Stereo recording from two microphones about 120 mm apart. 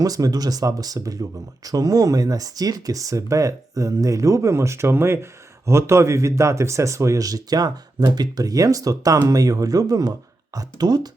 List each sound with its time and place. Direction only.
0.0 s speech: 30° right (ahead or behind)